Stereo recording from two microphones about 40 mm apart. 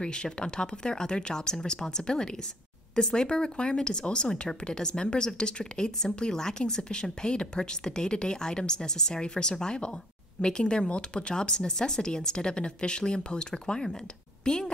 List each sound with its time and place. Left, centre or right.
0.0 s a woman's voice: left